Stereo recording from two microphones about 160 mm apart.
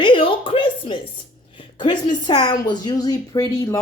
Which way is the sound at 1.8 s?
30° left (ahead or behind).